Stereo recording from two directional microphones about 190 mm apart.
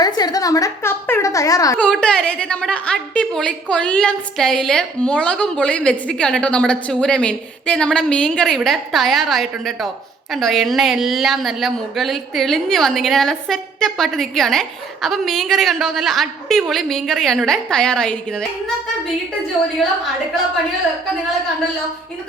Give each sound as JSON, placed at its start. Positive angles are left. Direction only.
{"t": 0.0, "sound": "a child's voice", "side_deg": 20}
{"t": 1.8, "sound": "a woman's voice", "side_deg": 5}